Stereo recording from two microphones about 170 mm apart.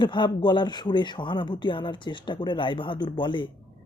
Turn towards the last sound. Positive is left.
turn(degrees=30)  # may be behind; listen again after turning